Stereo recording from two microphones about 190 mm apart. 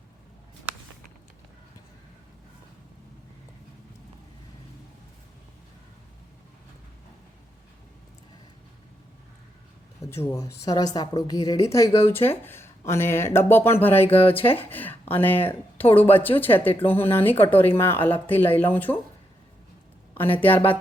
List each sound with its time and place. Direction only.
10.0 s a woman's voice: 15° left (ahead or behind)
16.4 s speech: 10° left (ahead or behind)
20.1 s speech: 10° left (ahead or behind)